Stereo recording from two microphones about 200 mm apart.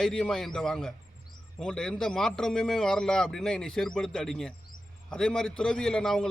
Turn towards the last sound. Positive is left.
turn(degrees=5)  # may be behind; listen again after turning